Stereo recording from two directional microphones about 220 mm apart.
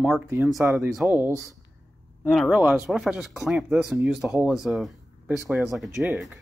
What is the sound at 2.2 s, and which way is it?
Speech, centre (ahead or behind).